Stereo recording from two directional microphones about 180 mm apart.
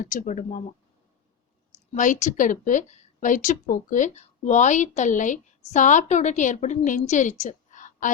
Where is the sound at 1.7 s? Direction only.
45° left (ahead or behind).